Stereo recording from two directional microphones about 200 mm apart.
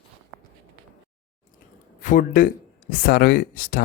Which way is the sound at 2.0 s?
45° left (ahead or behind).